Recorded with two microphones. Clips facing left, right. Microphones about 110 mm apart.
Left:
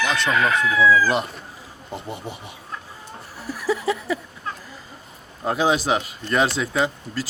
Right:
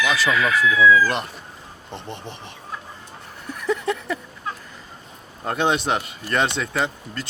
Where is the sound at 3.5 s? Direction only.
5° left (ahead or behind).